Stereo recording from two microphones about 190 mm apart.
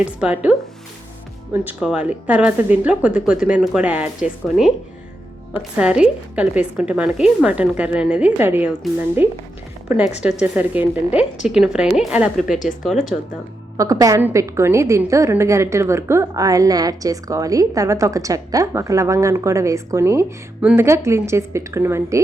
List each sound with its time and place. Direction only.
0.0 s a woman's voice: 5° right (ahead or behind)
1.6 s a woman's voice: 5° right (ahead or behind)
10.4 s speech: 10° right (ahead or behind)
13.7 s a woman's voice: 20° right (ahead or behind)